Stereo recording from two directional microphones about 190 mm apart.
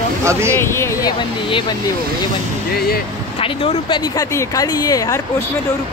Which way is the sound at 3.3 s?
30° left (ahead or behind).